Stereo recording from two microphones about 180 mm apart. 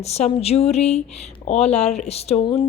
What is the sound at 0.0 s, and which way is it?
Speech, 35° left (ahead or behind).